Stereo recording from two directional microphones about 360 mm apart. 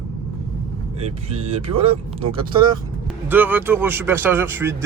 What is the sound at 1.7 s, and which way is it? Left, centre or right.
Speech, centre.